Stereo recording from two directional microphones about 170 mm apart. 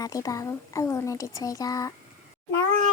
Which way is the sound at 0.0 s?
20° left (ahead or behind).